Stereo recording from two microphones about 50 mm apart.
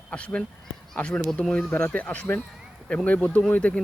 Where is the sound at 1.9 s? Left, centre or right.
Left.